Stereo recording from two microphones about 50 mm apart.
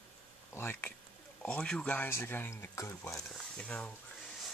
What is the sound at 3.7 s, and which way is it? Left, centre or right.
Speech, left.